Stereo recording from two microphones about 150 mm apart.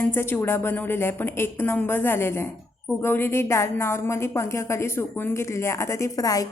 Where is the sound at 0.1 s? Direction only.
15° left (ahead or behind).